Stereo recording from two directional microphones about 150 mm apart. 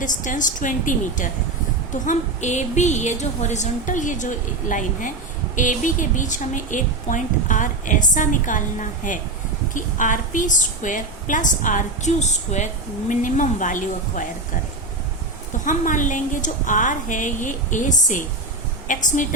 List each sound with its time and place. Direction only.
0.0 s a woman's voice: 60° left (ahead or behind)
15.6 s a woman's voice: 60° left (ahead or behind)